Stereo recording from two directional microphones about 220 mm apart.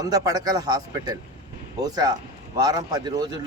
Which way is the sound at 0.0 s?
15° right (ahead or behind).